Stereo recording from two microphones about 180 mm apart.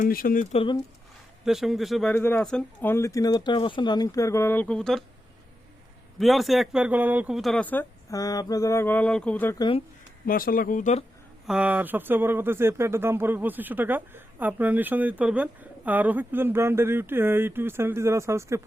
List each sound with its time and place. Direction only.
0.0 s speech: 50° left (ahead or behind)
0.5 s speech: 30° left (ahead or behind)
1.5 s speech: centre (ahead or behind)
6.1 s speech: centre (ahead or behind)
9.6 s speech: 25° left (ahead or behind)
10.2 s speech: 55° left (ahead or behind)
11.4 s speech: 5° right (ahead or behind)